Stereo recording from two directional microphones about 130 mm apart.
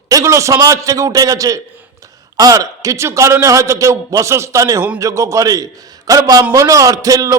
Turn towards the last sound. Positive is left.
turn(degrees=-25)  # may be behind; listen again after turning